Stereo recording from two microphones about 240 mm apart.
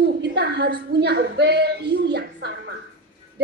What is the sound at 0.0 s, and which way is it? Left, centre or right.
A woman's voice, right.